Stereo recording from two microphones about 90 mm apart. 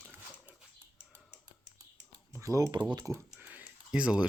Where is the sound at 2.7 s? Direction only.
50° right (ahead or behind).